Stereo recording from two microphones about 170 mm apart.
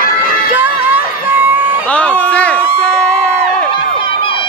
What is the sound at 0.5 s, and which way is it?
Music, 10° right (ahead or behind).